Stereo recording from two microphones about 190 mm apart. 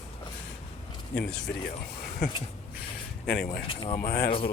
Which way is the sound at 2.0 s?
50° left (ahead or behind).